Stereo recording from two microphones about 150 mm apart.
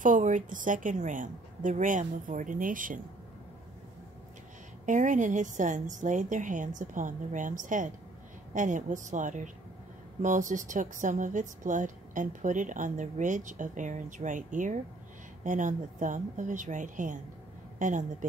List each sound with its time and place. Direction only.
0.0 s speech: 60° right (ahead or behind)
4.8 s a woman's voice: 55° right (ahead or behind)